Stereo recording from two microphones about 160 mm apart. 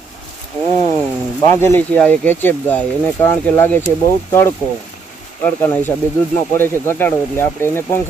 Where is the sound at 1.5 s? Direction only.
15° left (ahead or behind).